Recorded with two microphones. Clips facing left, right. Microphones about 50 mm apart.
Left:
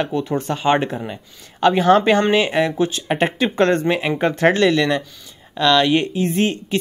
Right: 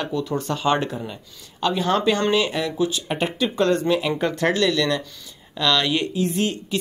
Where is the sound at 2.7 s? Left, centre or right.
Left.